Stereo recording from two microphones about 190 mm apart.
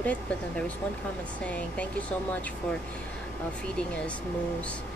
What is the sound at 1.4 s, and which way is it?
Speech, 5° left (ahead or behind).